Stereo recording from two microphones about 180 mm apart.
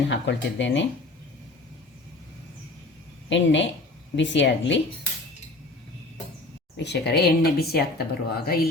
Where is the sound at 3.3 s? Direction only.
90° left.